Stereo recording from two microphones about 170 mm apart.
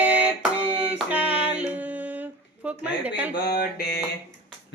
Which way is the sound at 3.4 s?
70° left (ahead or behind).